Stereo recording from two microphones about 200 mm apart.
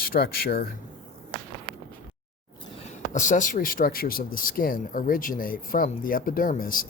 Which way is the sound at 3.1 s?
40° left (ahead or behind).